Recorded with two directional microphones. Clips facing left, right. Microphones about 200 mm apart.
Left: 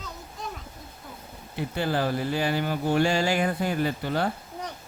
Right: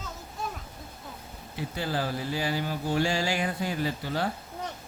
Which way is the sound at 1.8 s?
60° left (ahead or behind).